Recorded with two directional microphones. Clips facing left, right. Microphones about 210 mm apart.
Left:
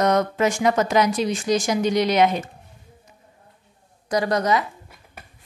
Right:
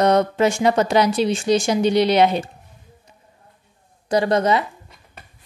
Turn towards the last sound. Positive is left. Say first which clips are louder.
# right 3 dB
turn(degrees=-25)  # may be behind; listen again after turning